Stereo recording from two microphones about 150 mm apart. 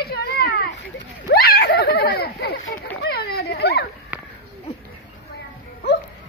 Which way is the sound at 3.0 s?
90° left.